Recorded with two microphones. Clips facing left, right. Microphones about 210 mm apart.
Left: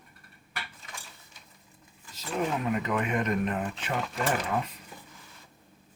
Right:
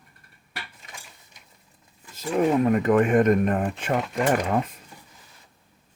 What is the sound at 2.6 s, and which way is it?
Speech, 50° right (ahead or behind).